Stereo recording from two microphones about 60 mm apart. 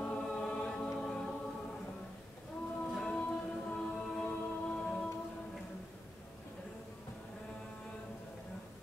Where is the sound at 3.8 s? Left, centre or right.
Left.